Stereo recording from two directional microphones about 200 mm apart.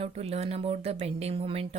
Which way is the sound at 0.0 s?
30° right (ahead or behind).